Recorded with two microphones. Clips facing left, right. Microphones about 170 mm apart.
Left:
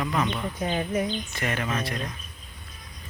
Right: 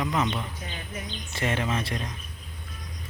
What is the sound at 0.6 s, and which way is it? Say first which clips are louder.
Speech: left 12 dB; 40° left (ahead or behind).